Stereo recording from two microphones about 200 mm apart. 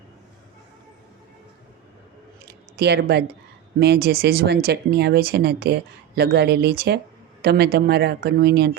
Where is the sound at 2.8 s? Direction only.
55° right (ahead or behind).